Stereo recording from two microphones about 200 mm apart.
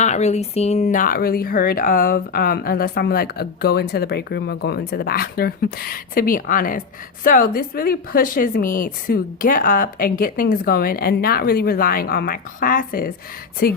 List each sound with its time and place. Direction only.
0.0 s speech: 35° left (ahead or behind)